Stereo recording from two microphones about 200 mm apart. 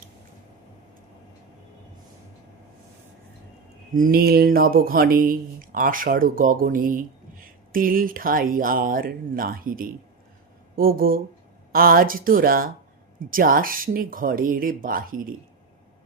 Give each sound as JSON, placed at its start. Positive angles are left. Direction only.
{"t": 3.9, "sound": "speech", "side_deg": -45}